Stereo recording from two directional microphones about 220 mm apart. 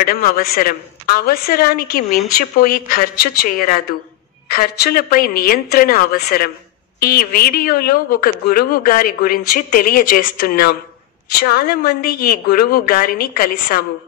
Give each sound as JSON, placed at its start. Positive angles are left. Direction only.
{"t": 0.0, "sound": "a woman's voice", "side_deg": 40}